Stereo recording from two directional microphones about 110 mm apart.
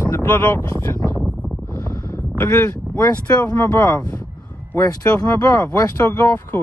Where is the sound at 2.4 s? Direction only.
25° left (ahead or behind).